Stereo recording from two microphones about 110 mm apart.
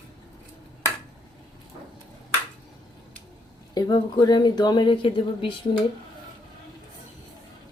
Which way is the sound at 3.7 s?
35° left (ahead or behind).